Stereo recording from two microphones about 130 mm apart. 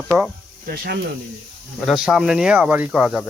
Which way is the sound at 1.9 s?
5° right (ahead or behind).